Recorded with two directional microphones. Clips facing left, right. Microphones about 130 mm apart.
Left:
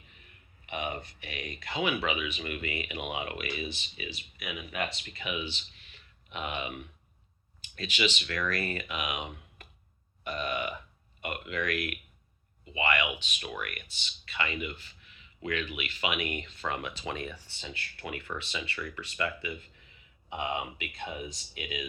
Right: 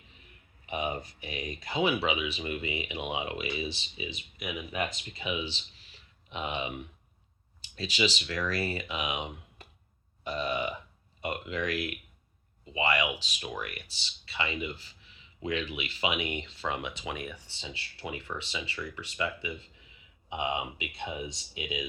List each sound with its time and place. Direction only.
0.7 s a sound: 30° right (ahead or behind)
1.2 s speech: 25° right (ahead or behind)
2.4 s speech: 15° right (ahead or behind)
5.5 s a sound: 30° right (ahead or behind)
7.8 s speech: 30° right (ahead or behind)
13.4 s speech: 15° right (ahead or behind)
13.7 s speech: 30° right (ahead or behind); by 17.4 s 10° right (ahead or behind)
17.4 s speech: 20° right (ahead or behind)